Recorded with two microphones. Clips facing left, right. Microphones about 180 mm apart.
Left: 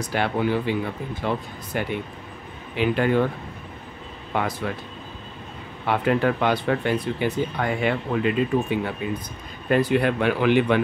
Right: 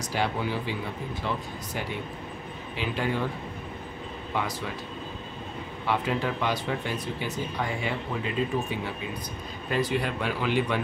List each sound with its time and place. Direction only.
0.0 s speech: 60° left (ahead or behind)
4.3 s speech: 55° left (ahead or behind)
5.9 s speech: 60° left (ahead or behind)